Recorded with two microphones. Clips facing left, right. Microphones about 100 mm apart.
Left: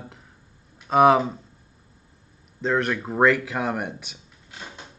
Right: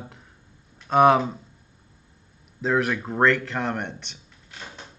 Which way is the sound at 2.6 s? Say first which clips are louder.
Even; centre (ahead or behind).